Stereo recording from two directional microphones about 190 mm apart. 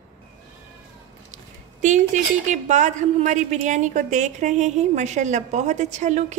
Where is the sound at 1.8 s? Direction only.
40° right (ahead or behind).